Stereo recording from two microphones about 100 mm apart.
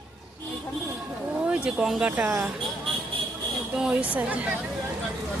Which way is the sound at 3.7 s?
5° right (ahead or behind).